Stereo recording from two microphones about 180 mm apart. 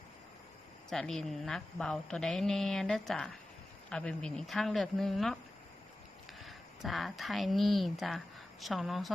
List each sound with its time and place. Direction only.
0.9 s a woman's voice: 5° left (ahead or behind)
6.4 s a woman's voice: centre (ahead or behind)